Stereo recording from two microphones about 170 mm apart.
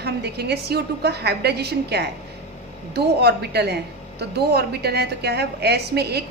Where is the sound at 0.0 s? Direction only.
75° right (ahead or behind).